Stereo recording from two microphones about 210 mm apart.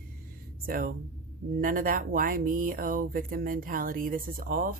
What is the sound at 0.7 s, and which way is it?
Speech, 45° right (ahead or behind).